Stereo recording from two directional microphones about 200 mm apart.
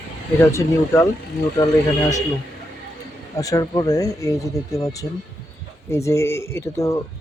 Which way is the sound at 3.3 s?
15° left (ahead or behind).